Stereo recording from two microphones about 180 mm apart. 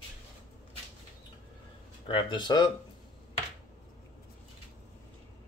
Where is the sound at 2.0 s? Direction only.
25° left (ahead or behind).